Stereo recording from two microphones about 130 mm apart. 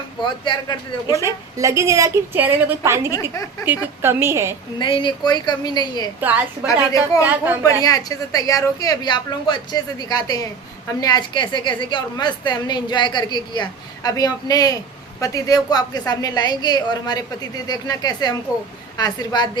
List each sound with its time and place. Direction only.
1.1 s speech: 25° right (ahead or behind)
4.8 s a woman's voice: 40° left (ahead or behind)
6.1 s a woman's voice: 15° right (ahead or behind)
6.7 s a woman's voice: 25° left (ahead or behind)
7.2 s a woman's voice: 15° right (ahead or behind)
7.6 s a woman's voice: 30° left (ahead or behind)